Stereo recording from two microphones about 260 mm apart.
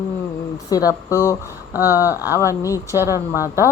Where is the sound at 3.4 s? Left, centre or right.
Centre.